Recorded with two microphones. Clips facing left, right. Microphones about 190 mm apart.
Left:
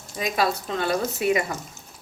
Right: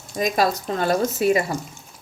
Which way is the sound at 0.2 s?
40° right (ahead or behind).